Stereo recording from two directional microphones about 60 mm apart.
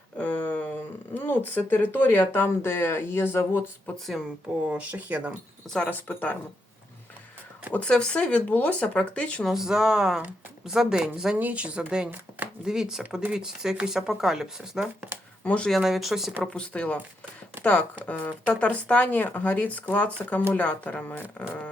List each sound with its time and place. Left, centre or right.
0.2 s a sound: left
1.1 s speech: left
3.9 s speech: centre
4.7 s speech: right
5.6 s speech: centre
5.9 s speech: left
7.7 s speech: centre
9.5 s speech: centre
11.3 s speech: right
12.6 s speech: centre
15.4 s speech: centre
15.7 s speech: centre
16.5 s speech: centre